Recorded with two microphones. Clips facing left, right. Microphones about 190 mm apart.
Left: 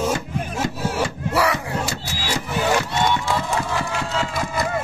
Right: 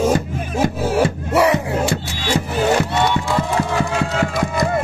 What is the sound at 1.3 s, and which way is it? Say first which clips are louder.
Battle cry: right 5 dB; 25° right (ahead or behind).